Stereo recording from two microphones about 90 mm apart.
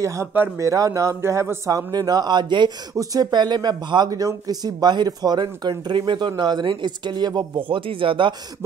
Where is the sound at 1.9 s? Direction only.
50° right (ahead or behind).